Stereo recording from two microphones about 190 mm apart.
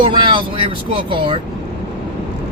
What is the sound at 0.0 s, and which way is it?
Speech, 25° right (ahead or behind).